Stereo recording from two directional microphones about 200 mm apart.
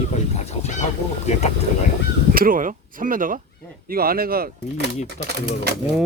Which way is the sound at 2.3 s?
45° right (ahead or behind).